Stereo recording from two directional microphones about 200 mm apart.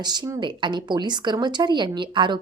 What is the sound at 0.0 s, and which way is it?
A woman's voice, 20° right (ahead or behind).